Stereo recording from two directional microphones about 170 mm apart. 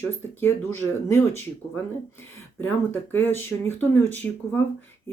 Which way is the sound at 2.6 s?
10° left (ahead or behind).